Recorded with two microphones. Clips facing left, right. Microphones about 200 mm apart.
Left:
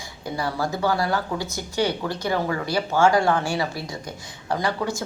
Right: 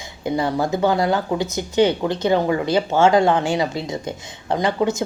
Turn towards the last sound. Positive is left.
turn(degrees=-20)  # may be behind; listen again after turning